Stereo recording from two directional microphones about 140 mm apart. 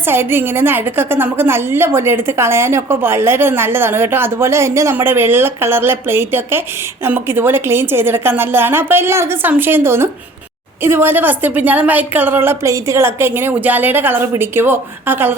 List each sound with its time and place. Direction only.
0.0 s a woman's voice: 15° right (ahead or behind)